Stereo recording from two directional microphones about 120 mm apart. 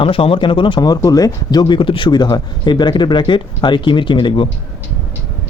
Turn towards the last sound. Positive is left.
turn(degrees=45)  # may be behind; listen again after turning